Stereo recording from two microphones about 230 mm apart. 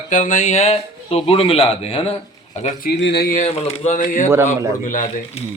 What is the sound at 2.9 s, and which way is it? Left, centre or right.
A man's voice, left.